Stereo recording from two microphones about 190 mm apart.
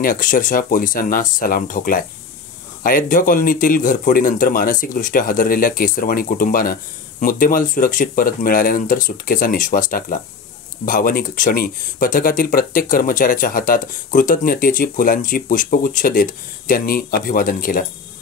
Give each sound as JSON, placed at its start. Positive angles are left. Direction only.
{"t": 0.0, "sound": "speech", "side_deg": 45}